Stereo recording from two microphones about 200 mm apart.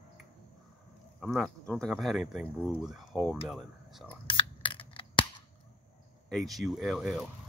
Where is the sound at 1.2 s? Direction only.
Centre (ahead or behind).